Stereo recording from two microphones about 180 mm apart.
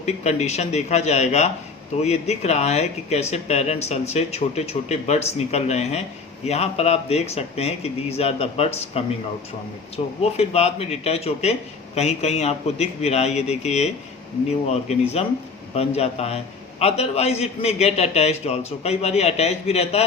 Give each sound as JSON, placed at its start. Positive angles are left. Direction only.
{"t": 0.0, "sound": "speech", "side_deg": 40}
{"t": 10.2, "sound": "speech", "side_deg": 35}